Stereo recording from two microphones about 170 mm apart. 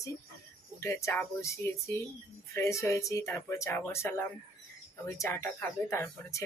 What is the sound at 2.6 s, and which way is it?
Speech, 15° left (ahead or behind).